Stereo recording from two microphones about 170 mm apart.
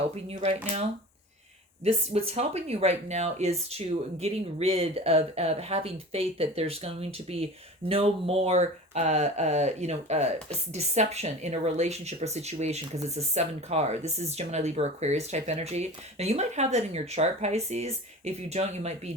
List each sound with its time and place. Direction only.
2.1 s speech: 35° right (ahead or behind)